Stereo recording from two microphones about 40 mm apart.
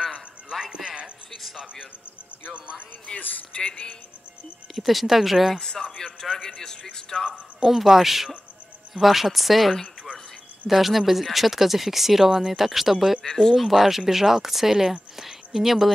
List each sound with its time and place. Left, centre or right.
0.0 s music: centre
2.5 s speech: right
3.1 s speech: left
4.7 s speech: centre
5.6 s a man's voice: centre
7.6 s speech: centre
13.2 s a man's voice: centre
13.6 s speech: centre